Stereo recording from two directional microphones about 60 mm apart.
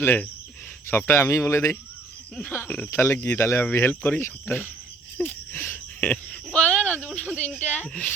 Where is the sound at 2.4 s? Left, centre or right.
Left.